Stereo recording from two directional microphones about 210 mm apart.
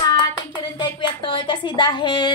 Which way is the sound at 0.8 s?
20° left (ahead or behind).